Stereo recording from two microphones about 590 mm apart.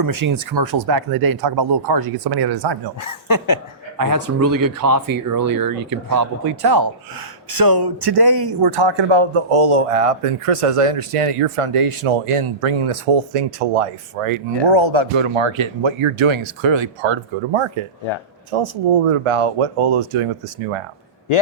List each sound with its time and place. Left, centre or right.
0.0 s speech: right
3.0 s speech: left
3.9 s speech: right